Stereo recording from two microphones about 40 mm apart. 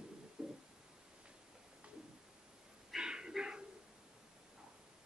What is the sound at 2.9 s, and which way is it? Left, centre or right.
Dog, centre.